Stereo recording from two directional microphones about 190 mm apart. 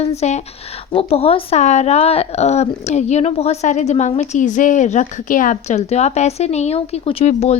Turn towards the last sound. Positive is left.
turn(degrees=35)  # may be behind; listen again after turning